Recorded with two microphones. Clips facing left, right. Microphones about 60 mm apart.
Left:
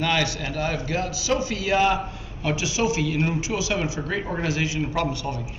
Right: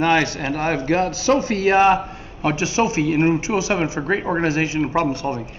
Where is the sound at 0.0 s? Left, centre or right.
Right.